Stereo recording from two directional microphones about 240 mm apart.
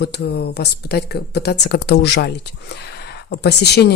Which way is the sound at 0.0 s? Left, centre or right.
Left.